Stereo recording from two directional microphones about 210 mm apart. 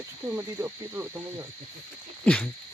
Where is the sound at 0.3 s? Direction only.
10° right (ahead or behind).